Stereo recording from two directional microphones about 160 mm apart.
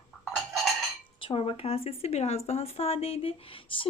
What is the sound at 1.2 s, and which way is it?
Speech, 35° left (ahead or behind).